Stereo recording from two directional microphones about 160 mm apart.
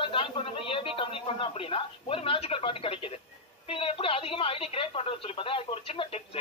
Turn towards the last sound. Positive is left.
turn(degrees=35)  # may be behind; listen again after turning